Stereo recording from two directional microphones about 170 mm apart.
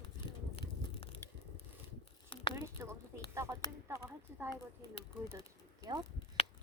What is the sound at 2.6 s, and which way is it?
Speech, 15° right (ahead or behind).